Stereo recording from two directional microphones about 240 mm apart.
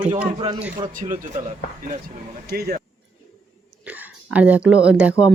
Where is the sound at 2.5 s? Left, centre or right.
Right.